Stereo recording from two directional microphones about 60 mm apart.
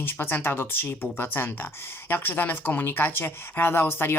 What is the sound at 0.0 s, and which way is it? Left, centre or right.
Speech, left.